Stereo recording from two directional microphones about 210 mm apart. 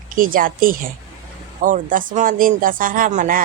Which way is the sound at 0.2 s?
40° right (ahead or behind).